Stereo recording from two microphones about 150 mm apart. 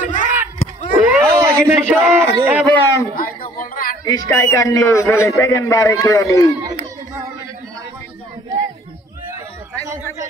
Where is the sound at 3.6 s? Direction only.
65° left (ahead or behind).